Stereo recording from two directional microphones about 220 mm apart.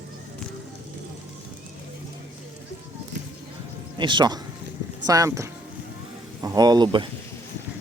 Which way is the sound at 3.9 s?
20° right (ahead or behind).